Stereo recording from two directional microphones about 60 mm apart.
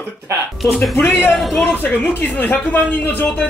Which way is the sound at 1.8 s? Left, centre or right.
Left.